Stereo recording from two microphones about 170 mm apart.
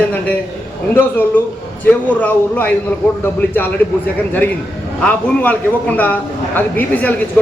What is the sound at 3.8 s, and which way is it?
Speech, 10° left (ahead or behind).